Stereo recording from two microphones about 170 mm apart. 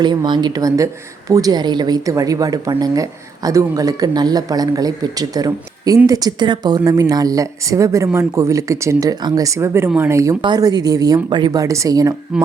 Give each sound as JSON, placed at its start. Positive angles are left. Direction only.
{"t": 0.0, "sound": "speech", "side_deg": -25}